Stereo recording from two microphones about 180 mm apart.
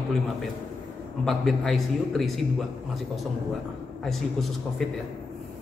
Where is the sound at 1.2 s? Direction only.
Centre (ahead or behind).